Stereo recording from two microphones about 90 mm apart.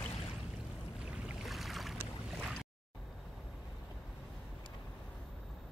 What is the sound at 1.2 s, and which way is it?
Boat, centre (ahead or behind).